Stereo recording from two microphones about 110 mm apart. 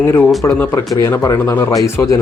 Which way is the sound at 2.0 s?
20° left (ahead or behind).